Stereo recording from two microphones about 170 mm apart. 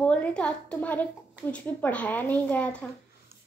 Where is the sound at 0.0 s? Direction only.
5° left (ahead or behind).